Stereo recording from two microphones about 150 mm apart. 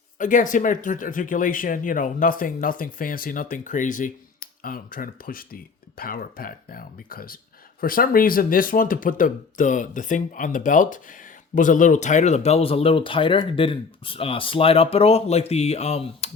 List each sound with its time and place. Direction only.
0.2 s speech: 60° left (ahead or behind)
4.6 s speech: 70° left (ahead or behind); by 16.3 s 45° left (ahead or behind)